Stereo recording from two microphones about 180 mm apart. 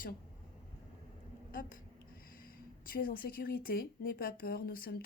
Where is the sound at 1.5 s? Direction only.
50° left (ahead or behind).